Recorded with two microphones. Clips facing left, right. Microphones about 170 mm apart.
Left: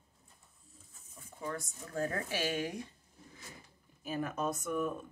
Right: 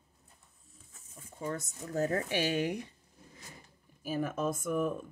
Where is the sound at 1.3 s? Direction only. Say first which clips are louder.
Right 3 dB; 20° right (ahead or behind).